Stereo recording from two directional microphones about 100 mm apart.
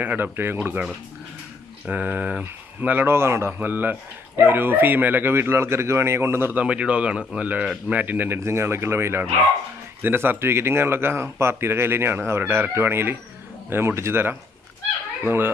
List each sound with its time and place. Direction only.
0.0 s speech: 20° right (ahead or behind)
1.9 s speech: 15° right (ahead or behind)